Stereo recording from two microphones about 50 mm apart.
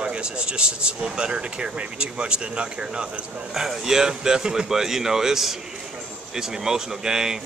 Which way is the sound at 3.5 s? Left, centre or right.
Centre.